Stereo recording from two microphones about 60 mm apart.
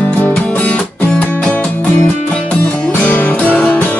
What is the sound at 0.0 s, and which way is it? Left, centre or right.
Music, left.